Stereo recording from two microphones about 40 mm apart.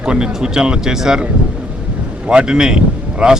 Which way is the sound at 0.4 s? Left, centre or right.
Right.